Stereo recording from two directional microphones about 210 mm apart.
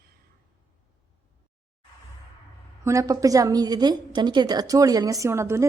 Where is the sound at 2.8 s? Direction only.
15° right (ahead or behind).